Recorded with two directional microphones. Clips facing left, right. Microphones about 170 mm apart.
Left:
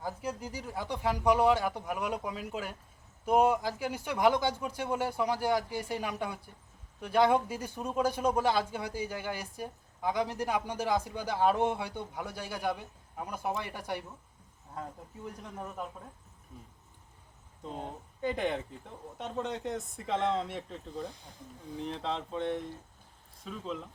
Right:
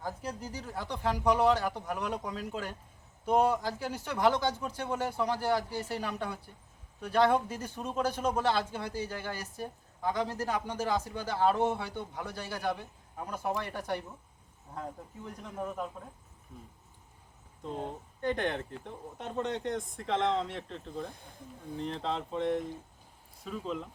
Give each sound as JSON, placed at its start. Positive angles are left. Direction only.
{"t": 0.0, "sound": "a man's voice", "side_deg": 10}
{"t": 17.7, "sound": "speech", "side_deg": 5}
{"t": 21.1, "sound": "speech", "side_deg": -55}
{"t": 21.8, "sound": "speech", "side_deg": 0}